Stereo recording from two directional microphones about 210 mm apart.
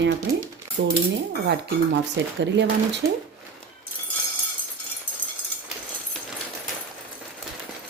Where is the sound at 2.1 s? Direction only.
55° right (ahead or behind).